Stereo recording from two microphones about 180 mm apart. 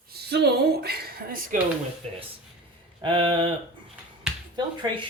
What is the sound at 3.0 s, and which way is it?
Speech, 30° right (ahead or behind).